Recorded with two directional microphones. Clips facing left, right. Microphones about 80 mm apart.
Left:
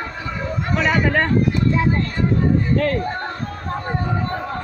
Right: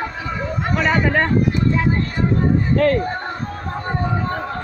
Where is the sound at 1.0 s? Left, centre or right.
Centre.